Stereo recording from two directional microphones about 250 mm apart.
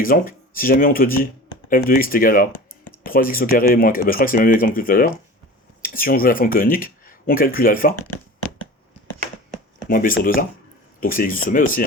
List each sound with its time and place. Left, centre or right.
0.0 s speech: left
7.9 s a sound: left
9.9 s speech: left